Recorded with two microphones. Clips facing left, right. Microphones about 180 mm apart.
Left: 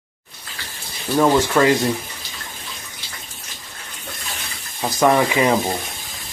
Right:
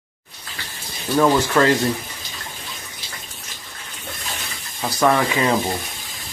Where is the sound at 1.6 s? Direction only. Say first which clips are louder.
Even; 10° left (ahead or behind).